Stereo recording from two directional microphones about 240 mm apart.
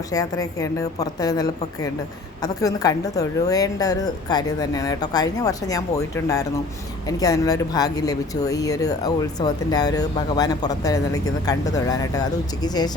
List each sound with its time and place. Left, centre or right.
0.1 s speech: centre